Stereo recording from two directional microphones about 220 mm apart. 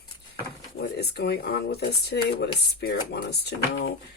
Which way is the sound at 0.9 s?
45° left (ahead or behind).